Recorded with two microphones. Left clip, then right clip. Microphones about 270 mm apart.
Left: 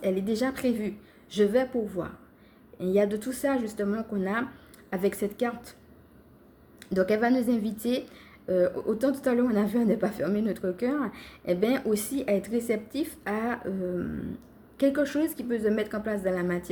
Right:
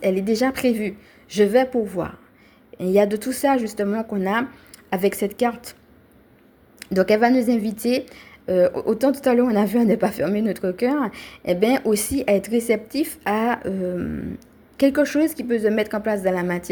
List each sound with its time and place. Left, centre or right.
0.0 s a woman's voice: right
6.7 s a woman's voice: right